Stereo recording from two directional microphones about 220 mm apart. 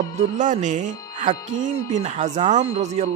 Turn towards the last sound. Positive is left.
turn(degrees=-30)  # may be behind; listen again after turning